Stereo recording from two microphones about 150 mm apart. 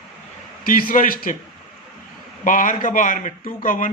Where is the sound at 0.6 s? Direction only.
70° left (ahead or behind).